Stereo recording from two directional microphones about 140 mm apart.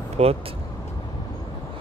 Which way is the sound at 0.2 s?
50° right (ahead or behind).